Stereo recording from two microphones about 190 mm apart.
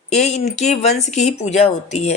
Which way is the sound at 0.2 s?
35° left (ahead or behind).